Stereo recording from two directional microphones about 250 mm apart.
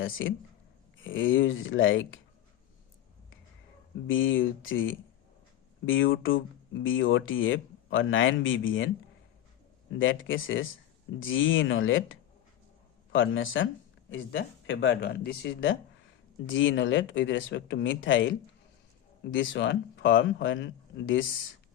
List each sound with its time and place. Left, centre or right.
0.0 s speech: left
4.0 s speech: left
10.0 s speech: left
13.1 s speech: left